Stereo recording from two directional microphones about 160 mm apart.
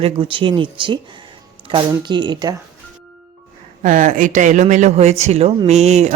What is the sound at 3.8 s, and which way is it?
Speech, 55° right (ahead or behind).